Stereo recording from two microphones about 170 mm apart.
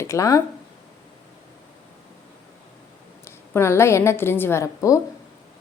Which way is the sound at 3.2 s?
15° left (ahead or behind).